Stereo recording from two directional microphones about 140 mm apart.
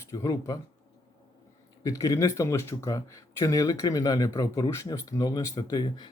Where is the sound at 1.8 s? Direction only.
25° left (ahead or behind).